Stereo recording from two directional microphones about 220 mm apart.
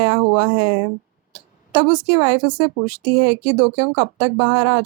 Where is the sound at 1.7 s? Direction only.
20° right (ahead or behind).